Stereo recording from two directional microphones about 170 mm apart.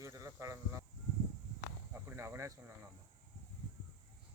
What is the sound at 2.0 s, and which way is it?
Cricket, 15° right (ahead or behind).